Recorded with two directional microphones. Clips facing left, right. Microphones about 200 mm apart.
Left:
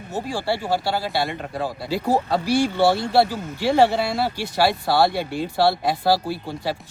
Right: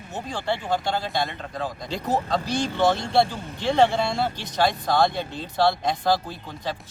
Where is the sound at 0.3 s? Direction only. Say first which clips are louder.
Left 2 dB; 10° left (ahead or behind).